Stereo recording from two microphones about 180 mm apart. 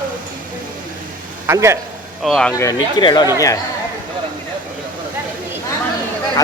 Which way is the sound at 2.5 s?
20° left (ahead or behind).